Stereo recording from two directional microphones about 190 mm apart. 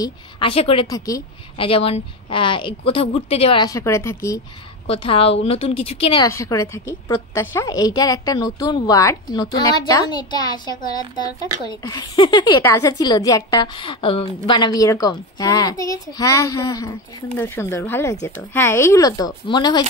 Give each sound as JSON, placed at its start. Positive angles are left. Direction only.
{"t": 0.0, "sound": "a woman's voice", "side_deg": 30}
{"t": 0.8, "sound": "speech", "side_deg": 20}
{"t": 1.6, "sound": "a woman's voice", "side_deg": 30}
{"t": 3.6, "sound": "speech", "side_deg": 15}
{"t": 4.8, "sound": "a woman's voice", "side_deg": 30}
{"t": 6.2, "sound": "a woman's voice", "side_deg": 15}